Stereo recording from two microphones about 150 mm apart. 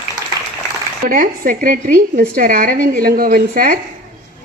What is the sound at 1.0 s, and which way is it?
A woman's voice, 65° right (ahead or behind).